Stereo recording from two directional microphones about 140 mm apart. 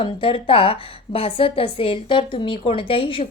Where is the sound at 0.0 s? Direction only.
40° left (ahead or behind).